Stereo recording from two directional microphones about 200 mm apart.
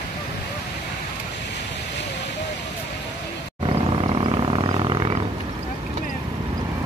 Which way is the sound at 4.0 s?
25° right (ahead or behind).